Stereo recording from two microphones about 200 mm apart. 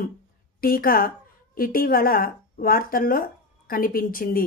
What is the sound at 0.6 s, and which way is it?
A woman's voice, 45° left (ahead or behind).